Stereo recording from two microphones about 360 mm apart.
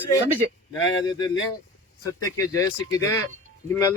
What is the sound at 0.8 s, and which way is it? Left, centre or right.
Speech, left.